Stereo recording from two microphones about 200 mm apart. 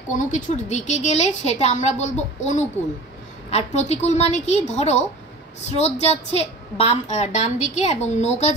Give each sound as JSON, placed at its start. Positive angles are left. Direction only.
{"t": 0.2, "sound": "a woman's voice", "side_deg": 35}